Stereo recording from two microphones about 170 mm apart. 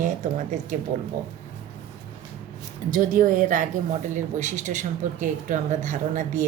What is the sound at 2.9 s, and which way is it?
Speech, 50° right (ahead or behind).